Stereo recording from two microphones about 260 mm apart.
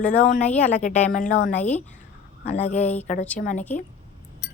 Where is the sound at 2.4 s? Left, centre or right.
Left.